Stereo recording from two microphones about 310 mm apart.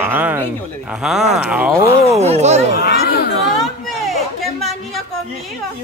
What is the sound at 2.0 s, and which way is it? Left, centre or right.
Speech, centre.